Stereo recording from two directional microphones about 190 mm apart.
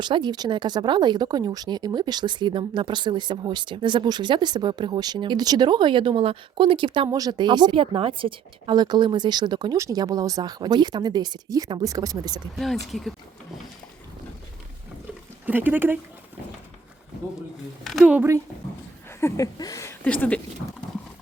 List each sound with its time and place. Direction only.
0.0 s speech: 25° right (ahead or behind)
12.5 s speech: centre (ahead or behind)
15.4 s a woman's voice: 10° right (ahead or behind)
17.8 s a woman's voice: centre (ahead or behind)
19.2 s speech: 15° left (ahead or behind)